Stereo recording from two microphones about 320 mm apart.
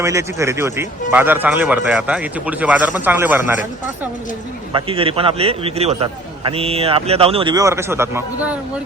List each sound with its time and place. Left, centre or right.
0.0 s speech: centre
4.7 s a man's voice: centre